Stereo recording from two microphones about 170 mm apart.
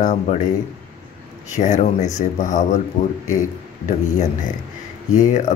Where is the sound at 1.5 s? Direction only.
45° left (ahead or behind).